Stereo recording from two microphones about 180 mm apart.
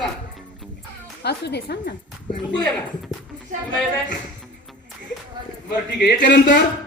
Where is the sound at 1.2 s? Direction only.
65° left (ahead or behind).